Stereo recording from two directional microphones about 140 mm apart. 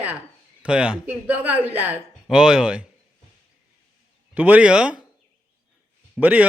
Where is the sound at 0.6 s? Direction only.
5° right (ahead or behind).